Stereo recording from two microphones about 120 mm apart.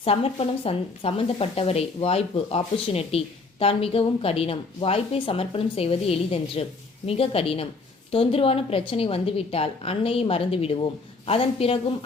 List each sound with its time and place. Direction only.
0.0 s speech: 55° left (ahead or behind)